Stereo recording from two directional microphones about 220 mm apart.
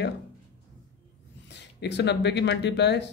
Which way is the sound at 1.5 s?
50° left (ahead or behind).